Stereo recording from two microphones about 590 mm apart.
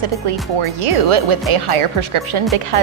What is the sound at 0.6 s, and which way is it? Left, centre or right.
Speech, right.